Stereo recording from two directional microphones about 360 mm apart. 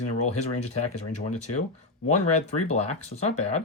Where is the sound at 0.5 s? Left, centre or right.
Left.